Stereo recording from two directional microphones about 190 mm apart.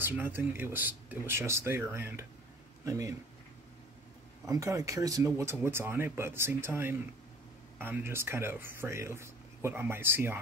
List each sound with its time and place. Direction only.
0.0 s speech: 10° right (ahead or behind)
4.5 s speech: 15° right (ahead or behind)